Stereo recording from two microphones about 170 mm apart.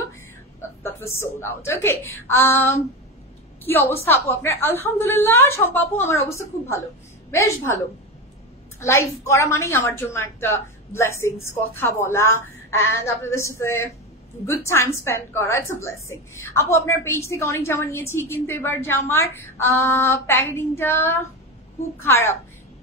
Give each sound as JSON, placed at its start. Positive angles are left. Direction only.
{"t": 0.6, "sound": "a woman's voice", "side_deg": 15}
{"t": 4.0, "sound": "a woman's voice", "side_deg": 15}
{"t": 8.7, "sound": "a woman's voice", "side_deg": 15}